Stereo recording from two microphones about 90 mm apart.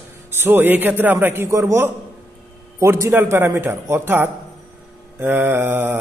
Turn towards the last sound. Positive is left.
turn(degrees=-20)  # may be behind; listen again after turning